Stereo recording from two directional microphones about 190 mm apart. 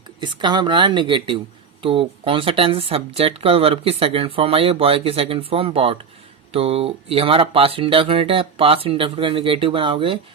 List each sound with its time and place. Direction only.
0.2 s speech: 25° right (ahead or behind)